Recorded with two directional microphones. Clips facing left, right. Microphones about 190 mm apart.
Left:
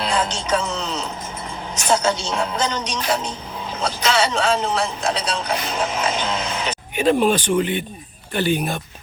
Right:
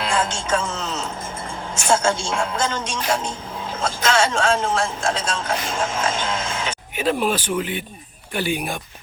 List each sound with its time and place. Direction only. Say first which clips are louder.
0.1 s speech: even; 50° right (ahead or behind)
1.9 s a man's voice: even; 50° right (ahead or behind)
6.9 s speech: left 4 dB; 5° right (ahead or behind)